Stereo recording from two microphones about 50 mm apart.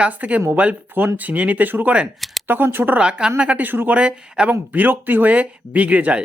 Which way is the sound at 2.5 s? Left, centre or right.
Right.